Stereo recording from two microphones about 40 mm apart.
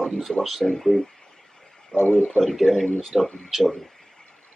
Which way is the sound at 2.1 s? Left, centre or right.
Centre.